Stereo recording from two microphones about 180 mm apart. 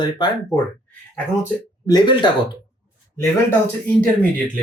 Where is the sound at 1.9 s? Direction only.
25° left (ahead or behind).